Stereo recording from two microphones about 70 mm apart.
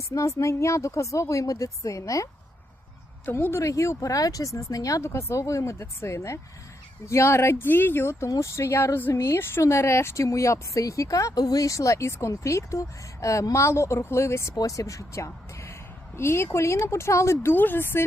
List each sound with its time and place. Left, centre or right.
0.1 s speech: left
3.2 s speech: left
5.0 s speech: left
14.5 s speech: left
17.4 s speech: left